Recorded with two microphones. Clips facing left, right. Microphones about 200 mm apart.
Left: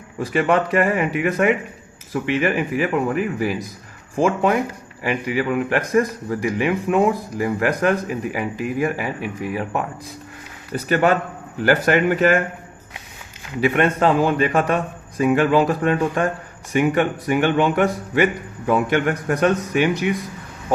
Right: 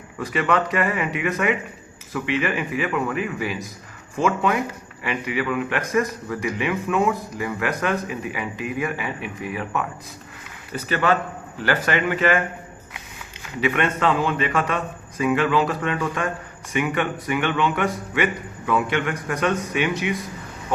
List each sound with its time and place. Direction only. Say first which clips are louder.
0.2 s a man's voice: left 4 dB; 30° left (ahead or behind)
10.8 s speech: left 4 dB; 45° left (ahead or behind)
13.6 s a man's voice: left 4 dB; 40° left (ahead or behind)